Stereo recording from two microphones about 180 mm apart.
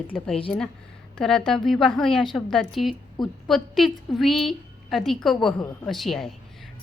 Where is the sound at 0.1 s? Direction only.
5° left (ahead or behind).